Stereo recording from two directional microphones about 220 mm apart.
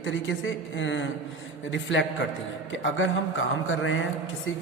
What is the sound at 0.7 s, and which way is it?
A woman's voice, 60° left (ahead or behind).